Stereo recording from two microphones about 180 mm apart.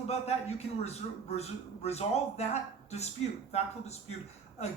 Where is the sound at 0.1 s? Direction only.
35° left (ahead or behind).